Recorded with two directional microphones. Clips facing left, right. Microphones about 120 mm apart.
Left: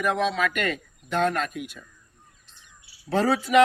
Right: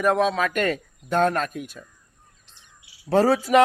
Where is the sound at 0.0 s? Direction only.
40° right (ahead or behind).